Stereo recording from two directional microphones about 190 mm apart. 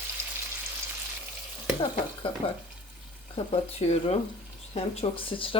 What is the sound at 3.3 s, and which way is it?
Speech, 35° left (ahead or behind).